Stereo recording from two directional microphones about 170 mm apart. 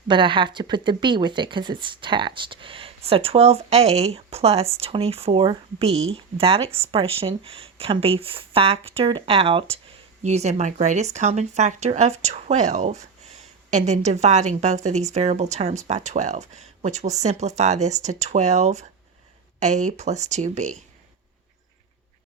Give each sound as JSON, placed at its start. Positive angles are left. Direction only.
{"t": 0.1, "sound": "speech", "side_deg": -30}